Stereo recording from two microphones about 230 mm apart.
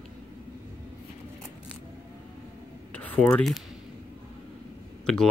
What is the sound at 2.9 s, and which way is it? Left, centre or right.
Speech, centre.